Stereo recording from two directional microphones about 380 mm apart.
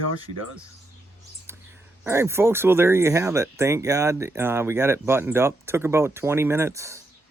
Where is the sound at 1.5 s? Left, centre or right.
Centre.